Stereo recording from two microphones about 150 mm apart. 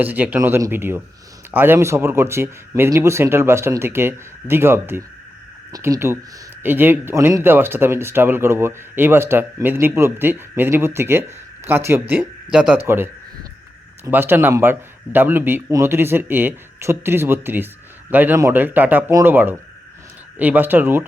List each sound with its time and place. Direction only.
0.0 s speech: 10° right (ahead or behind)